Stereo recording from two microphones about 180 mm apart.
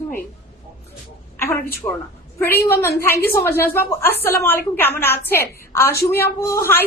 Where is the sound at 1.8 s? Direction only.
20° left (ahead or behind).